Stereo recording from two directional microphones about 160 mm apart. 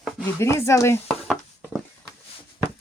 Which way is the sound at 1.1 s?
Centre (ahead or behind).